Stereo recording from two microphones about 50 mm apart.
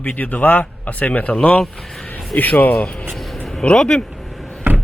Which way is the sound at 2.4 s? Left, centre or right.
Left.